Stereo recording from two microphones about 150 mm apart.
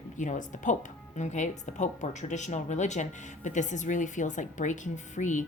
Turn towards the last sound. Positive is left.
turn(degrees=55)  # may be behind; listen again after turning